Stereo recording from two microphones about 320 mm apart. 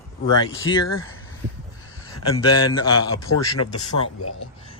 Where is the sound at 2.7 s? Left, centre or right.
Centre.